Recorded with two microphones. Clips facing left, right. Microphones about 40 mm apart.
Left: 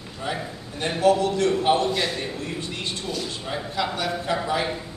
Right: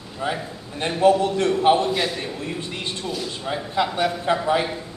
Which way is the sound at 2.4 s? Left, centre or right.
Centre.